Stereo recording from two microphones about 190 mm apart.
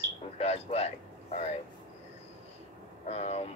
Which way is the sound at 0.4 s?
30° left (ahead or behind).